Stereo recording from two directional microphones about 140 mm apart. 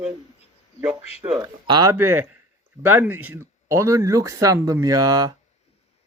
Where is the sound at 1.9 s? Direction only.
15° right (ahead or behind).